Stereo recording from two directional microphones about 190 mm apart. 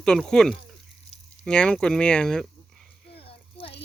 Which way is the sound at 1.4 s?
5° left (ahead or behind).